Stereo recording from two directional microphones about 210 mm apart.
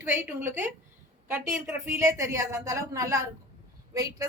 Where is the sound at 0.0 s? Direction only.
10° right (ahead or behind).